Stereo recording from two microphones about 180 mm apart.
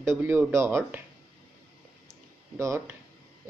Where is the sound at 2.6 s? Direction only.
15° right (ahead or behind).